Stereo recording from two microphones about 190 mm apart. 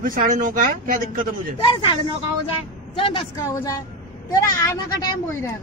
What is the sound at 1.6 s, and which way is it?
Speech, 25° left (ahead or behind).